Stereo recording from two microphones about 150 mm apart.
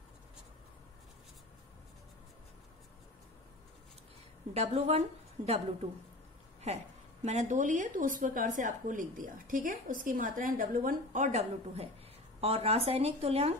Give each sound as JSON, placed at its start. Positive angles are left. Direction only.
{"t": 4.6, "sound": "a woman's voice", "side_deg": -45}
{"t": 7.2, "sound": "a woman's voice", "side_deg": -50}